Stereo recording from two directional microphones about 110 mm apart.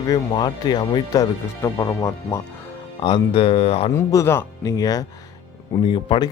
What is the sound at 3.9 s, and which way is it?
Speech, 25° left (ahead or behind).